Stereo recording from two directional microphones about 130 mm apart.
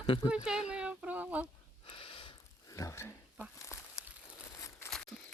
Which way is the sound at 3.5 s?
25° left (ahead or behind).